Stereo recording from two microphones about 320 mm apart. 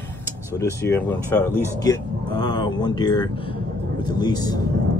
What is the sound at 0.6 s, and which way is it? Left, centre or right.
Speech, centre.